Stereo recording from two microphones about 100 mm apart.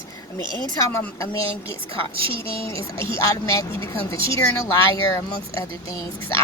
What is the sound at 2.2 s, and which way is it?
Speech, 65° right (ahead or behind).